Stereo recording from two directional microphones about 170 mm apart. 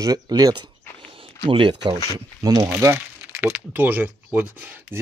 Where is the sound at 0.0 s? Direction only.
20° right (ahead or behind).